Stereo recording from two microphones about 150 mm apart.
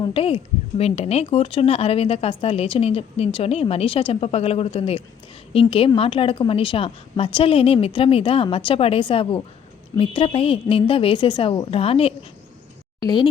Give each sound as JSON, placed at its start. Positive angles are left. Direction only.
{"t": 0.0, "sound": "a woman's voice", "side_deg": 40}
{"t": 13.0, "sound": "speech", "side_deg": 30}